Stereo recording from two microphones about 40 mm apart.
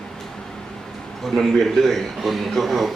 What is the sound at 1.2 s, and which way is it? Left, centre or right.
Speech, centre.